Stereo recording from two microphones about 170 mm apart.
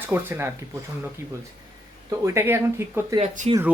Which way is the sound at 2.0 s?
15° right (ahead or behind).